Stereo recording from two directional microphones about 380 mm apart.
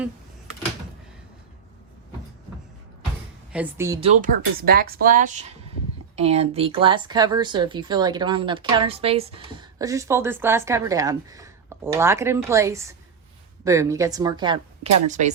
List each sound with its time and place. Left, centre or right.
3.5 s speech: centre